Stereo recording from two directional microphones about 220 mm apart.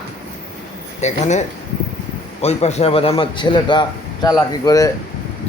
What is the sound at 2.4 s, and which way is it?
A man's voice, 30° left (ahead or behind).